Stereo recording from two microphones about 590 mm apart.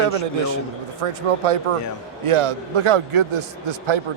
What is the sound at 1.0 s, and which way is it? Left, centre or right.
A man's voice, right.